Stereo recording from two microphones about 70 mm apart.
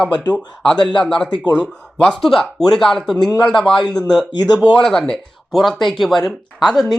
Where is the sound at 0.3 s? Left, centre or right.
Centre.